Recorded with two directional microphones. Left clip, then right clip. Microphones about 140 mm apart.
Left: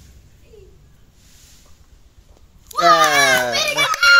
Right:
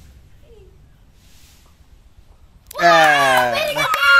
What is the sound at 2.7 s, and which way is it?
Cat, 45° right (ahead or behind).